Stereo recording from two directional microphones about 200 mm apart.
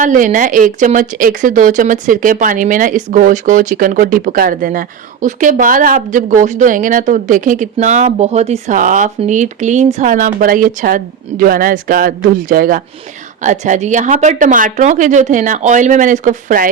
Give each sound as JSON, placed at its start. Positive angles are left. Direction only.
{"t": 0.0, "sound": "speech", "side_deg": -40}